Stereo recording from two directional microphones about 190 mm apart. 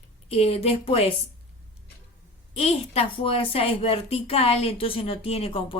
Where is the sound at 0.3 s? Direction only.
30° left (ahead or behind).